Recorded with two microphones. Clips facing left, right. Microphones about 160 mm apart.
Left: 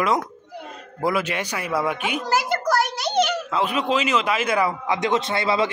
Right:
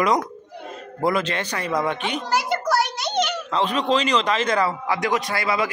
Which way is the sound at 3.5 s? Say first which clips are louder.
Right 1 dB; 10° left (ahead or behind).